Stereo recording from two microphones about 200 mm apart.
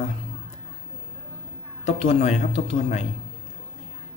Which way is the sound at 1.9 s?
30° left (ahead or behind).